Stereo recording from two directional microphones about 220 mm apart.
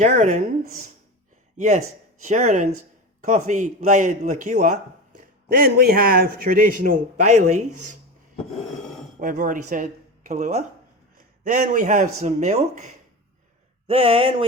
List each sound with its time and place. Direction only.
0.0 s speech: 35° right (ahead or behind)
1.5 s speech: 30° right (ahead or behind)
7.7 s speech: 90° right
9.1 s speech: 35° right (ahead or behind)